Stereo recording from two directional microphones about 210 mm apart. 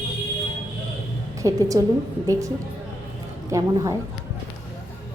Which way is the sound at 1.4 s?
15° right (ahead or behind).